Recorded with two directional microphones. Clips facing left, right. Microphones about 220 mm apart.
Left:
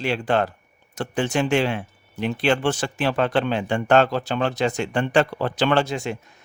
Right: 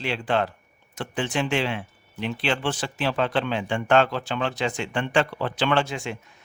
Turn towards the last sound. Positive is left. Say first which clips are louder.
# left 3 dB
turn(degrees=40)  # may be behind; listen again after turning